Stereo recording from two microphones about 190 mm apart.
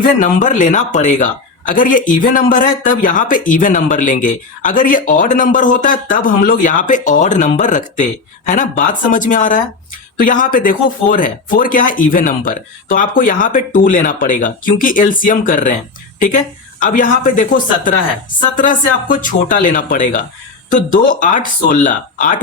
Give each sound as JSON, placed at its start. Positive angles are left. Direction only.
{"t": 0.0, "sound": "speech", "side_deg": 40}
{"t": 16.8, "sound": "speech", "side_deg": 45}